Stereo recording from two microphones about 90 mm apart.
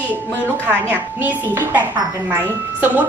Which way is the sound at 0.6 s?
20° right (ahead or behind).